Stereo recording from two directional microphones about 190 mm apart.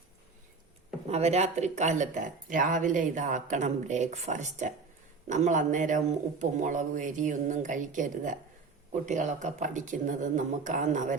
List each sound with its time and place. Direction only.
1.1 s speech: 35° right (ahead or behind)